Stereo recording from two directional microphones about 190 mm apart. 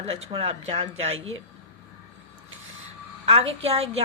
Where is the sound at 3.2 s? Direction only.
30° right (ahead or behind).